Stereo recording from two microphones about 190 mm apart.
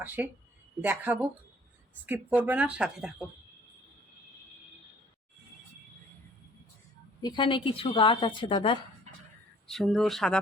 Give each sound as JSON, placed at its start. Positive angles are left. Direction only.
{"t": 0.2, "sound": "a woman's voice", "side_deg": -10}
{"t": 7.2, "sound": "speech", "side_deg": 25}
{"t": 9.6, "sound": "speech", "side_deg": 0}